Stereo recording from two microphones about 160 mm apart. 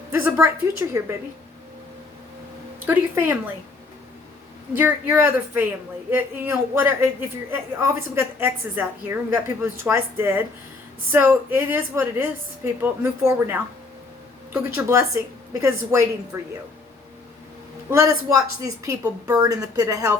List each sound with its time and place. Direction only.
0.1 s a woman's voice: 15° right (ahead or behind)
2.8 s a woman's voice: 15° right (ahead or behind)
4.7 s a woman's voice: 10° right (ahead or behind)
17.9 s a woman's voice: 20° right (ahead or behind)